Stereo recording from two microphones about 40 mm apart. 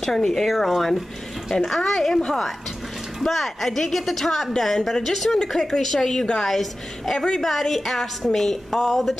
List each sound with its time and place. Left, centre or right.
0.3 s a woman's voice: centre
1.5 s a woman's voice: centre
7.2 s a woman's voice: centre
7.4 s a woman's voice: centre